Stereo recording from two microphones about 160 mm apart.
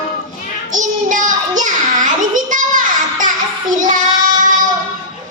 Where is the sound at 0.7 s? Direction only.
55° right (ahead or behind).